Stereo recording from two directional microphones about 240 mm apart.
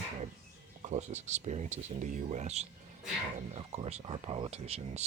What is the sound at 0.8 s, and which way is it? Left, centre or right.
Speech, right.